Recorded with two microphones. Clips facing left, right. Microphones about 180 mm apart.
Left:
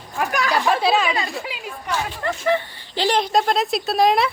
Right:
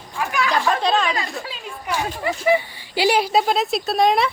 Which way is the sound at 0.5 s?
10° left (ahead or behind).